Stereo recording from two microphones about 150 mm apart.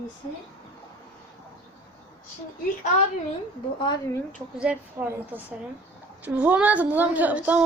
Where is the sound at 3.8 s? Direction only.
30° left (ahead or behind).